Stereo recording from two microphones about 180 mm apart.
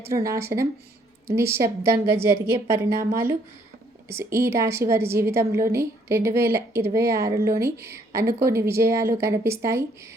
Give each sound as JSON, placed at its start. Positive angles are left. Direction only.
{"t": 0.1, "sound": "a woman's voice", "side_deg": -15}